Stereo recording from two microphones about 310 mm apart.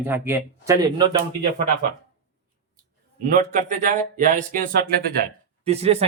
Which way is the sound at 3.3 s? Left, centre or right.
Right.